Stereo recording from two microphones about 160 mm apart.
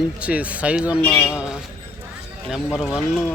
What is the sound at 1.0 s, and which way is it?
Speech, 15° left (ahead or behind).